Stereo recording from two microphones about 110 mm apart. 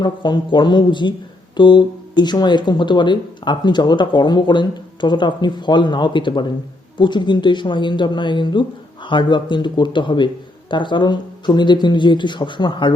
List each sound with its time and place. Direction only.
0.0 s speech: 45° left (ahead or behind)